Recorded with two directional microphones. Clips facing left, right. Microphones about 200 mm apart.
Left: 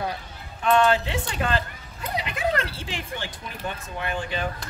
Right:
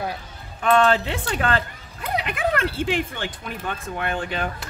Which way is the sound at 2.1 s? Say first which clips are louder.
Right 2 dB; 55° right (ahead or behind).